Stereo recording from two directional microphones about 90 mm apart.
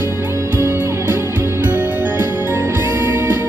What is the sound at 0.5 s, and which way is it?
Music, 25° right (ahead or behind).